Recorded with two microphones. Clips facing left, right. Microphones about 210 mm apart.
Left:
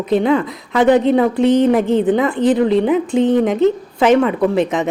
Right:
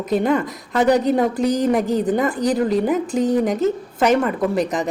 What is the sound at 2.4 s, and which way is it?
Speech, 40° right (ahead or behind).